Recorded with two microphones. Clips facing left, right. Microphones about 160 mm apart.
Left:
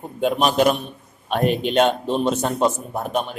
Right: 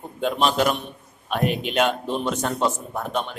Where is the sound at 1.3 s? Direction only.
35° left (ahead or behind).